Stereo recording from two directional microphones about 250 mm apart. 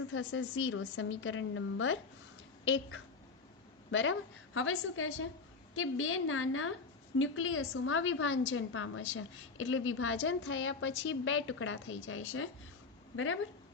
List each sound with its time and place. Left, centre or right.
0.1 s a woman's voice: left